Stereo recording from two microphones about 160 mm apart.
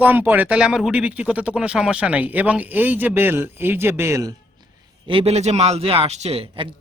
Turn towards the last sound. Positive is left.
turn(degrees=-40)  # may be behind; listen again after turning